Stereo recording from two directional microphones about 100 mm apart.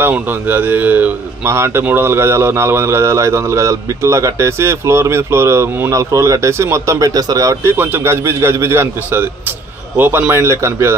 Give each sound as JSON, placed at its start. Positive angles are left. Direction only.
{"t": 0.0, "sound": "speech", "side_deg": -20}
{"t": 7.7, "sound": "speech", "side_deg": -20}